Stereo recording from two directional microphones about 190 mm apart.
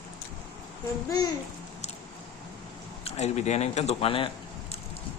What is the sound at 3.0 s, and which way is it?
Speech, 35° left (ahead or behind).